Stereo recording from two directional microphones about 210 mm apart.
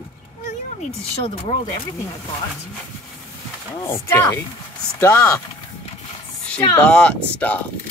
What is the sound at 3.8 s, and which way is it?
Speech, 10° left (ahead or behind).